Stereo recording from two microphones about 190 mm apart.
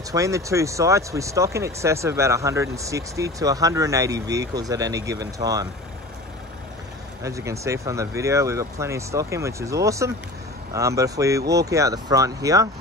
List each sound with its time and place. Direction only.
0.1 s speech: 15° right (ahead or behind)
7.2 s speech: 15° right (ahead or behind)